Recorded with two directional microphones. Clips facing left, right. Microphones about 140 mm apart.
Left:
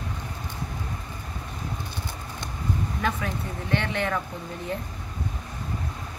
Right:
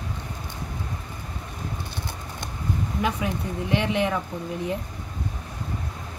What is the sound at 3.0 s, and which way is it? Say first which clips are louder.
Speech: right 5 dB; 15° right (ahead or behind).